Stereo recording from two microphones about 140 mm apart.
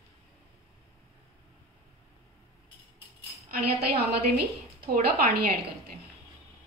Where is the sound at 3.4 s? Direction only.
90° right.